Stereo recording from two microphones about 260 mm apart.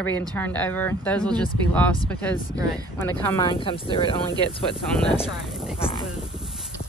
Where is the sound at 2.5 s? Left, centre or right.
Centre.